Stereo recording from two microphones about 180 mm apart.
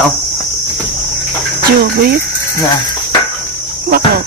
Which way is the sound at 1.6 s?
60° right (ahead or behind).